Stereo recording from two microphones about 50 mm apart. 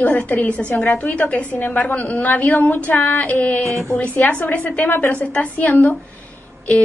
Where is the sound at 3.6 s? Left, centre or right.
Right.